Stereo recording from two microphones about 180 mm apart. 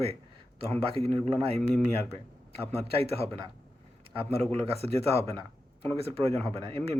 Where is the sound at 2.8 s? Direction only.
35° right (ahead or behind).